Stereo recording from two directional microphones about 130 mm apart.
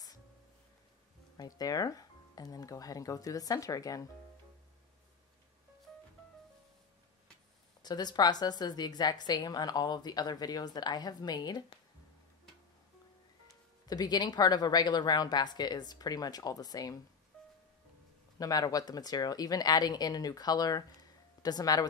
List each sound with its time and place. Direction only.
1.3 s speech: 30° left (ahead or behind)
7.8 s a woman's voice: 30° left (ahead or behind)
13.8 s a woman's voice: 30° left (ahead or behind)
18.4 s a woman's voice: 30° left (ahead or behind)